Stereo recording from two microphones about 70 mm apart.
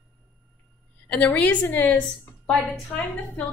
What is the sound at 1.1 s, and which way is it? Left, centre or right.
A woman's voice, centre.